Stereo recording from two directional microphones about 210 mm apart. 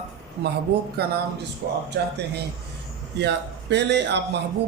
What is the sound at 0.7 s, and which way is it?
Speech, 50° right (ahead or behind).